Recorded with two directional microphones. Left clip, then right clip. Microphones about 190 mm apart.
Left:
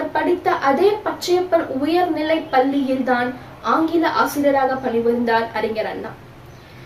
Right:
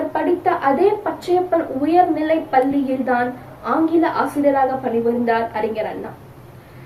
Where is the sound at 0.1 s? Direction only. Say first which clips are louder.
Left 1 dB; 20° left (ahead or behind).